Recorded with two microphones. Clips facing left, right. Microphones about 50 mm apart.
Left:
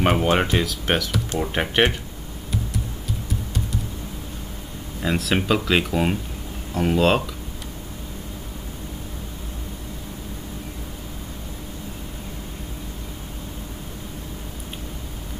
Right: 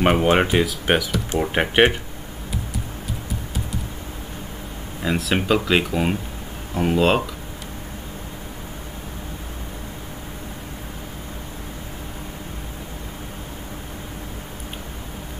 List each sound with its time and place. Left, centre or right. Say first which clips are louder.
0.0 s speech: right 2 dB; centre
5.0 s speech: right 1 dB; centre